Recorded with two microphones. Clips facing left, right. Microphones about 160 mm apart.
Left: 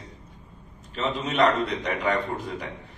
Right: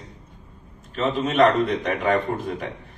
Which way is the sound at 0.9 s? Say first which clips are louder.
Right 5 dB; 50° right (ahead or behind).